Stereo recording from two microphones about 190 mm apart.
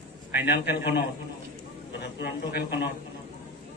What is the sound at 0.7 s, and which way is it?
Speech, 55° left (ahead or behind).